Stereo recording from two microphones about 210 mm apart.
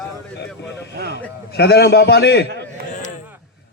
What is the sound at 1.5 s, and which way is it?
Speech, 50° left (ahead or behind).